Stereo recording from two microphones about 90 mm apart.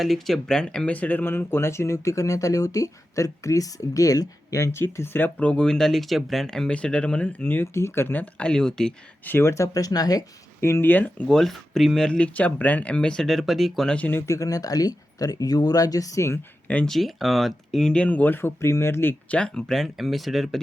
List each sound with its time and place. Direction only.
0.0 s speech: 5° left (ahead or behind); by 8.2 s 25° left (ahead or behind)
8.2 s speech: 10° left (ahead or behind)
9.2 s speech: 25° left (ahead or behind); by 10.2 s 45° left (ahead or behind)
10.6 s speech: 30° left (ahead or behind); by 13.9 s centre (ahead or behind)
13.9 s speech: 15° left (ahead or behind)
14.2 s speech: 35° left (ahead or behind)
16.6 s speech: 15° left (ahead or behind)
16.9 s speech: centre (ahead or behind); by 19.1 s 25° left (ahead or behind)
19.3 s speech: 10° left (ahead or behind)